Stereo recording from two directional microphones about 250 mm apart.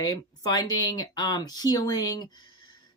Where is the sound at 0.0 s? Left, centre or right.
Centre.